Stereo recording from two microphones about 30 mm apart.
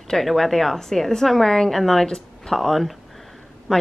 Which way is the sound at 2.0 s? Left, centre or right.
Left.